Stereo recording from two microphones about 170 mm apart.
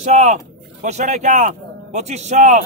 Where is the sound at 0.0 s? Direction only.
40° right (ahead or behind).